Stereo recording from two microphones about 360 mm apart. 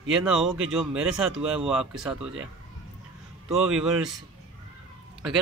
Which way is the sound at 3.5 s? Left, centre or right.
Centre.